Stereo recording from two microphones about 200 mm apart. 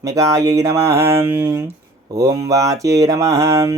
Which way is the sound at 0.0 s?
15° right (ahead or behind).